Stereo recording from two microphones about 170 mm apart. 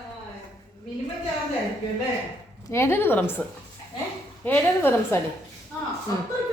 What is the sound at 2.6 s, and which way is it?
Speech, 15° left (ahead or behind).